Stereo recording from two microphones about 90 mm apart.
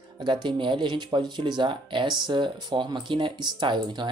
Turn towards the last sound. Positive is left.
turn(degrees=-55)  # may be behind; listen again after turning